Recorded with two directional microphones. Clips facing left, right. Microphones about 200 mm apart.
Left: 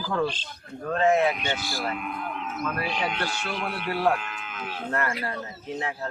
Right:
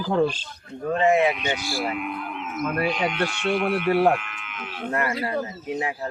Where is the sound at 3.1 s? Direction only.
35° left (ahead or behind).